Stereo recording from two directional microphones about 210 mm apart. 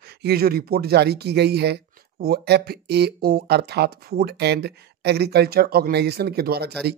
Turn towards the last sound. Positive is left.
turn(degrees=-50)  # may be behind; listen again after turning